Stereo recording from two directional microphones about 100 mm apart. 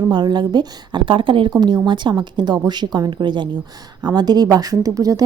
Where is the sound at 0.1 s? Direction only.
45° right (ahead or behind).